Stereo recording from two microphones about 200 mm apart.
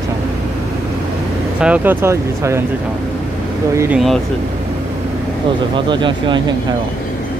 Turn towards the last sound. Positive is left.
turn(degrees=-25)  # may be behind; listen again after turning